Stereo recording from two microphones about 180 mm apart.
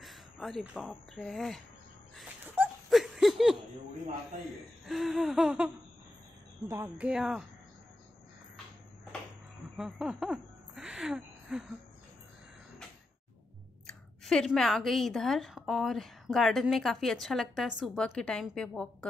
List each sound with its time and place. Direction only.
0.0 s speech: centre (ahead or behind)
2.4 s a sound: 10° right (ahead or behind)
4.8 s speech: centre (ahead or behind)
6.7 s a woman's voice: 15° right (ahead or behind)
7.1 s speech: 5° right (ahead or behind)
9.8 s a sound: 5° right (ahead or behind)
13.8 s speech: 5° left (ahead or behind)